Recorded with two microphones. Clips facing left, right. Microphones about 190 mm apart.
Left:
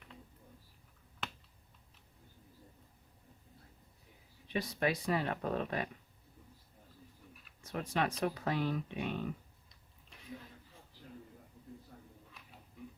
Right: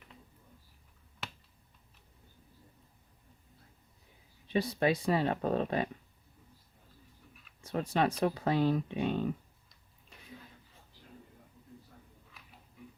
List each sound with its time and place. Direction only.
4.5 s speech: 30° right (ahead or behind)
7.6 s speech: 30° right (ahead or behind)